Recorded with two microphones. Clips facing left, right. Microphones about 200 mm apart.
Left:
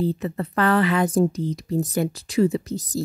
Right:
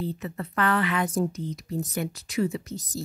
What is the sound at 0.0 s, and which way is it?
A woman's voice, 35° left (ahead or behind).